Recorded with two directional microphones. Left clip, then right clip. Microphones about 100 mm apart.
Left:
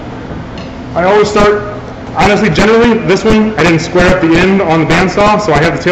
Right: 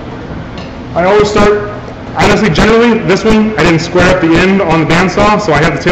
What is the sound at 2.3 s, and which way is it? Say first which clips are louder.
A man's voice: right 1 dB; 10° right (ahead or behind).